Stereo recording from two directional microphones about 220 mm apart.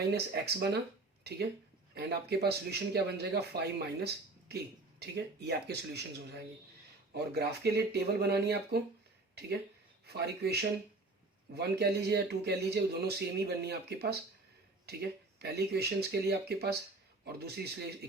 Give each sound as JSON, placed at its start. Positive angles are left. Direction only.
{"t": 0.1, "sound": "speech", "side_deg": -45}
{"t": 2.0, "sound": "speech", "side_deg": -50}
{"t": 10.1, "sound": "speech", "side_deg": -45}
{"t": 15.4, "sound": "speech", "side_deg": -45}